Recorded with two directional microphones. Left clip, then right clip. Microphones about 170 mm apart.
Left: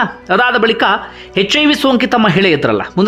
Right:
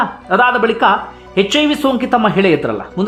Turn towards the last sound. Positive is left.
turn(degrees=20)  # may be behind; listen again after turning